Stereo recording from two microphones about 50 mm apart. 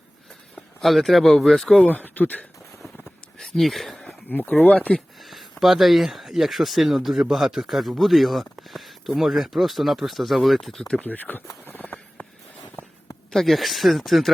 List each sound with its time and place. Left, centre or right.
0.8 s speech: centre
1.8 s speech: left
3.3 s speech: centre
4.3 s speech: left
4.6 s speech: left
4.9 s speech: centre
11.0 s speech: left
11.6 s a sound: left
13.3 s speech: centre